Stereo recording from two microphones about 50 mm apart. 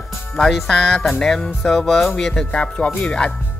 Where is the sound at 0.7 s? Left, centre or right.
Centre.